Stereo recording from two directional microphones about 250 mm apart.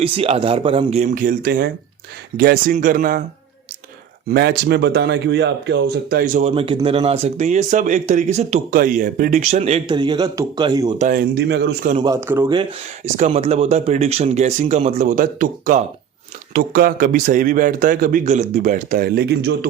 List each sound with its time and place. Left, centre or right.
0.0 s speech: right
4.3 s speech: right
11.9 s speech: centre
13.1 s speech: right